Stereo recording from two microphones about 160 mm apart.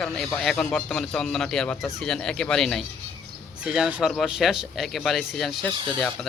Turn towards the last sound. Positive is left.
turn(degrees=-30)  # may be behind; listen again after turning